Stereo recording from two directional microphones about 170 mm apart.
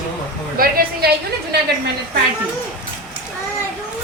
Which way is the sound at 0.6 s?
60° right (ahead or behind).